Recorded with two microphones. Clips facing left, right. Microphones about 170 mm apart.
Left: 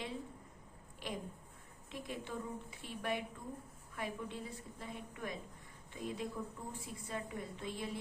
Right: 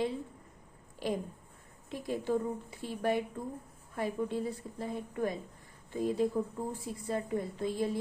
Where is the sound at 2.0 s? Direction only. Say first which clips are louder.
Right 12 dB; 40° right (ahead or behind).